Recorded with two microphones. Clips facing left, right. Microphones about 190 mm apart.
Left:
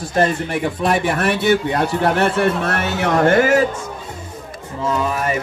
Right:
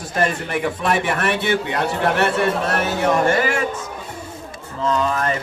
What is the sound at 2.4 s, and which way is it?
A man's voice, 60° left (ahead or behind).